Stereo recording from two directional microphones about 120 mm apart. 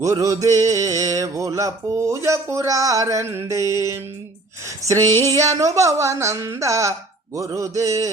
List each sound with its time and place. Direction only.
0.0 s music: 25° right (ahead or behind)
4.8 s music: 25° right (ahead or behind)